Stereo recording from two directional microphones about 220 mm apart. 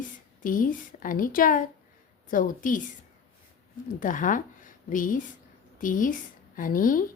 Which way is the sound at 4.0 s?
35° left (ahead or behind).